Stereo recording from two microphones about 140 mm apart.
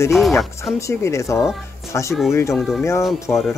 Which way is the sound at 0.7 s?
20° left (ahead or behind).